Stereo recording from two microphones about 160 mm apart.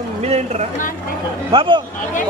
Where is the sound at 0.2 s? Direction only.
40° right (ahead or behind).